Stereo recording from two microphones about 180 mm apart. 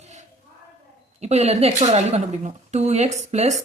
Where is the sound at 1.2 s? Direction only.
35° right (ahead or behind).